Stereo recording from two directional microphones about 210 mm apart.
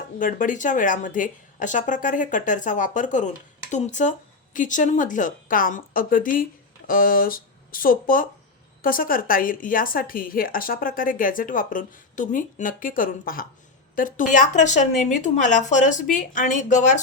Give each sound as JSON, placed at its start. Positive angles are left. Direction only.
{"t": 0.2, "sound": "a woman's voice", "side_deg": 40}